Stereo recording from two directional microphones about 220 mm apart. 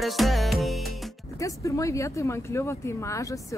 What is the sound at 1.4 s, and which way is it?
Speech, 15° left (ahead or behind).